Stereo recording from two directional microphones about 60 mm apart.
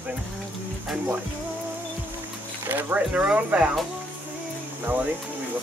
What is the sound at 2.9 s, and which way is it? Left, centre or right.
Speech, right.